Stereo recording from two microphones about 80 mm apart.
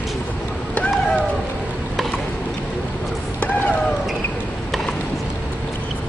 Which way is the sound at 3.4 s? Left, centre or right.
Centre.